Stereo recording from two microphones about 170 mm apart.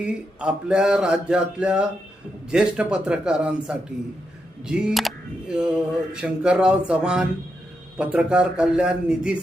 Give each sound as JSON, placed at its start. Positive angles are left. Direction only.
{"t": 0.0, "sound": "a man's voice", "side_deg": -5}